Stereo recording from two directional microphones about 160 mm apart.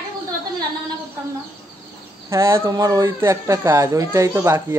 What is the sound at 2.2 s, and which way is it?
Speech, 15° right (ahead or behind).